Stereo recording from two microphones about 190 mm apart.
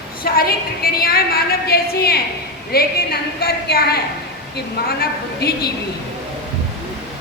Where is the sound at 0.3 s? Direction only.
50° left (ahead or behind).